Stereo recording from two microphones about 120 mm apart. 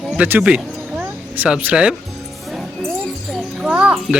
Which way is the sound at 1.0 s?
15° right (ahead or behind).